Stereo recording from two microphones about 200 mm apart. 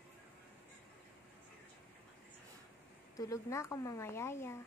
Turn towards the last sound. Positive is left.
turn(degrees=10)  # may be behind; listen again after turning